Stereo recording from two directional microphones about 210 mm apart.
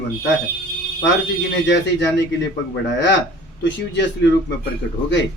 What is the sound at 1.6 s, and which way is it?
Speech, 55° left (ahead or behind).